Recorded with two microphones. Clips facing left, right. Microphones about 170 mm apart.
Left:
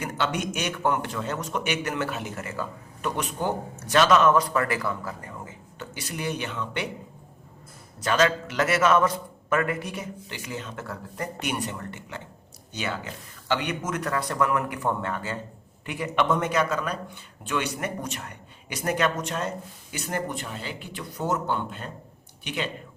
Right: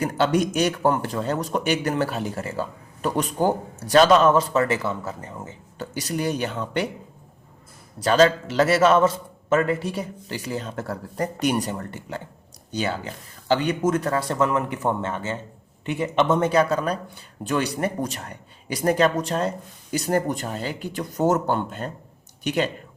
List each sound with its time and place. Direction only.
0.0 s a man's voice: 35° right (ahead or behind)
5.8 s a man's voice: 40° right (ahead or behind)
7.9 s a man's voice: 35° right (ahead or behind)